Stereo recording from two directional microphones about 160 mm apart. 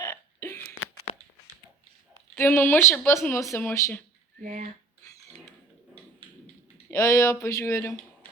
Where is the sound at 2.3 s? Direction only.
15° left (ahead or behind).